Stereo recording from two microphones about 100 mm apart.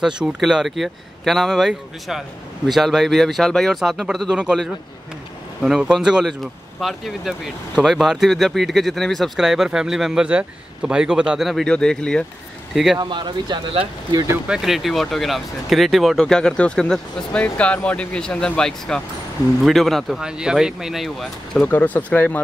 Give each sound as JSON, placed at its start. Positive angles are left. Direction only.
{"t": 0.0, "sound": "speech", "side_deg": -5}
{"t": 5.6, "sound": "speech", "side_deg": -5}
{"t": 13.1, "sound": "speech", "side_deg": -50}
{"t": 14.5, "sound": "speech", "side_deg": -5}
{"t": 21.5, "sound": "speech", "side_deg": 15}